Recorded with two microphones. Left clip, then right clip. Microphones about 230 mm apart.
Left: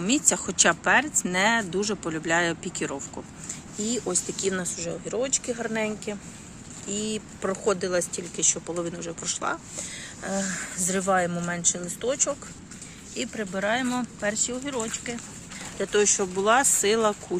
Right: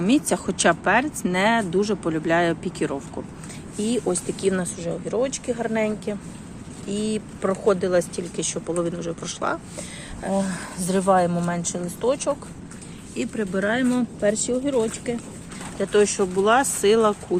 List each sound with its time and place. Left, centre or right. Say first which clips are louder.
0.0 s speech: right 4 dB; centre
13.1 s speech: right 4 dB; left
15.8 s speech: right 4 dB; centre